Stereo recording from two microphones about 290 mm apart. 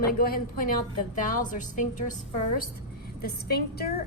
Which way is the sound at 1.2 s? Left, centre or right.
Left.